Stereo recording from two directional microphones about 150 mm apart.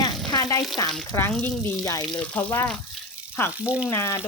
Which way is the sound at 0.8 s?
20° left (ahead or behind).